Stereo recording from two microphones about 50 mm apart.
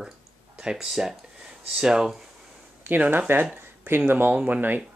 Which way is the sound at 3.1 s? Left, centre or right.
Right.